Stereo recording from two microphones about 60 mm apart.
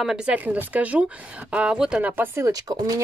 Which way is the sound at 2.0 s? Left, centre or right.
Right.